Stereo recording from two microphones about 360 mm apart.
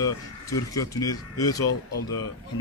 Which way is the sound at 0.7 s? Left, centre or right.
Centre.